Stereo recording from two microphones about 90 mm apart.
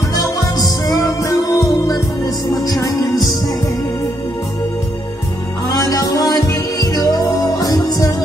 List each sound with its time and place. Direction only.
0.1 s music: 45° left (ahead or behind)
5.7 s music: 45° left (ahead or behind)